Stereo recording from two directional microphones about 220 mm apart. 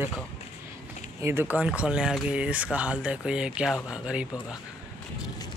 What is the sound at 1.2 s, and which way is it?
Speech, 10° right (ahead or behind).